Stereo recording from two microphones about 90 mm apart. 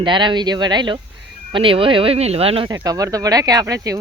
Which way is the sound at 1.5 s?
80° right.